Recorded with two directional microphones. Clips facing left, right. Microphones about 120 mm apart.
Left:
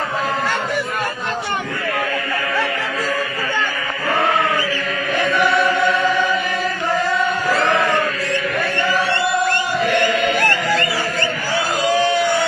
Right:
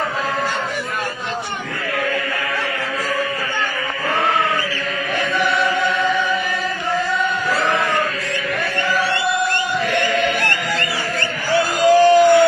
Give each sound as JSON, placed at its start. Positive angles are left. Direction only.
{"t": 11.8, "sound": "crowd", "side_deg": -45}